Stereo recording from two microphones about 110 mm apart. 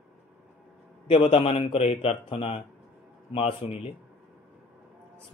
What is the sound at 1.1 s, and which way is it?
A man's voice, 55° left (ahead or behind).